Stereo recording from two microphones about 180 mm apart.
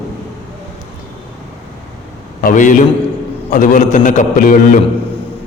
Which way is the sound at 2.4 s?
50° left (ahead or behind).